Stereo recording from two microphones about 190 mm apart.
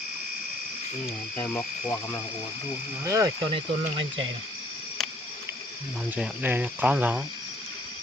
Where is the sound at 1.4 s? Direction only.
10° left (ahead or behind).